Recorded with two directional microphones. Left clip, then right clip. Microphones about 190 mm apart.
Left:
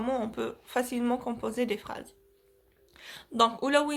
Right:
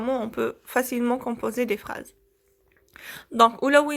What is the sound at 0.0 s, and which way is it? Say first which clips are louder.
Speech: right 5 dB; 25° right (ahead or behind).